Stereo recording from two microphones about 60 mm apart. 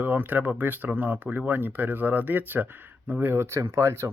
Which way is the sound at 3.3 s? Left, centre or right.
Right.